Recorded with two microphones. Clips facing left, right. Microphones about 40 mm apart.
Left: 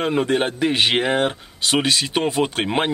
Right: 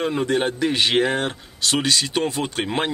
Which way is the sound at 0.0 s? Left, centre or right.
Left.